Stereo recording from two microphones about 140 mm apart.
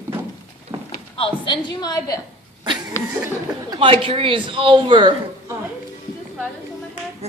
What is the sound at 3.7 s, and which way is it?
Speech, 40° right (ahead or behind).